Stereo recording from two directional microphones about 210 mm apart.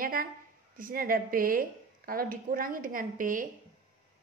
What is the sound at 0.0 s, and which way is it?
A woman's voice, 40° right (ahead or behind).